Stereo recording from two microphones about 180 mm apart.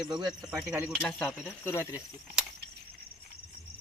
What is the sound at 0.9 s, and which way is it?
Speech, 5° left (ahead or behind).